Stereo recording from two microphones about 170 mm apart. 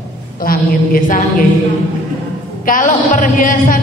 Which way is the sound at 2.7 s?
50° left (ahead or behind).